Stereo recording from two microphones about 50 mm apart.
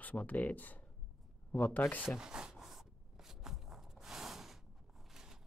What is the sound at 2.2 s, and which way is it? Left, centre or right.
Shuffling cards, centre.